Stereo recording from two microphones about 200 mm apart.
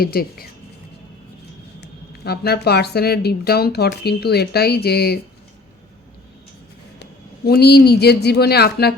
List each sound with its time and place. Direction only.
0.0 s speech: 50° left (ahead or behind)
1.8 s speech: 55° left (ahead or behind)
7.0 s a woman's voice: 55° left (ahead or behind)